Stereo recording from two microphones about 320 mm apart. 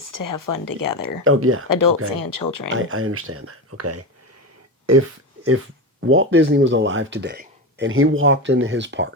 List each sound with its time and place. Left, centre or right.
0.0 s speech: left
1.2 s speech: right
1.7 s speech: left
2.7 s speech: right
6.1 s speech: right